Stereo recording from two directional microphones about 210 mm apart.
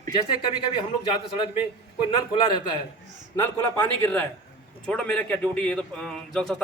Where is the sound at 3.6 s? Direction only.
10° left (ahead or behind).